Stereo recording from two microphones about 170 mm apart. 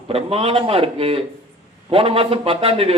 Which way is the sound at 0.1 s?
35° right (ahead or behind).